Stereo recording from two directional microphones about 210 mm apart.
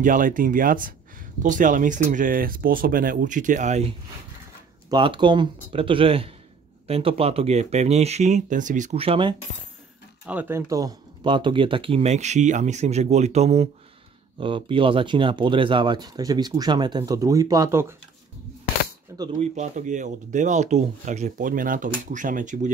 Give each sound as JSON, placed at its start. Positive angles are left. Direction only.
{"t": 0.0, "sound": "speech", "side_deg": -40}
{"t": 4.9, "sound": "speech", "side_deg": -20}
{"t": 10.2, "sound": "speech", "side_deg": -10}
{"t": 19.1, "sound": "cap gun", "side_deg": -15}
{"t": 19.4, "sound": "speech", "side_deg": -35}